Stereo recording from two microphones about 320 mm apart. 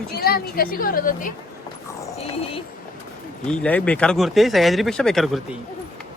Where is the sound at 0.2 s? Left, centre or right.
Left.